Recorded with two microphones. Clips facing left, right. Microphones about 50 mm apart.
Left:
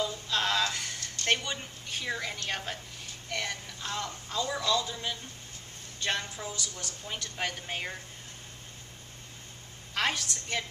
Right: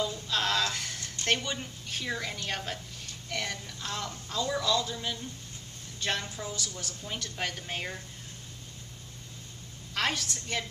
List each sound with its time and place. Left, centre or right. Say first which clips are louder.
0.0 s a sound: even; centre
1.2 s a woman's voice: even; centre
9.9 s a woman's voice: even; centre